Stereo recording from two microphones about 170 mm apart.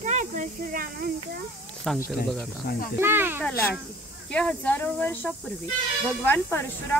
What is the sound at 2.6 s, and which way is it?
Speech, 65° left (ahead or behind).